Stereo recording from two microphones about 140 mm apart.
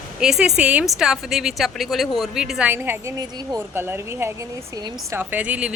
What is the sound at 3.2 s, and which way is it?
Speech, 30° right (ahead or behind).